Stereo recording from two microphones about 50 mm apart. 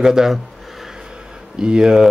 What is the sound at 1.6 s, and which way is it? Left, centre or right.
Speech, centre.